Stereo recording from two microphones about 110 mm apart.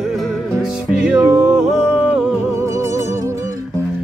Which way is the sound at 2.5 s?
25° right (ahead or behind).